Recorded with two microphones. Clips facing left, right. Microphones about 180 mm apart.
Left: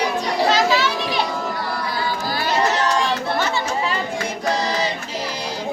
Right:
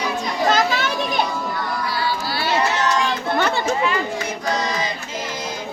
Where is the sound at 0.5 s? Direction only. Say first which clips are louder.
Left 1 dB; 50° right (ahead or behind).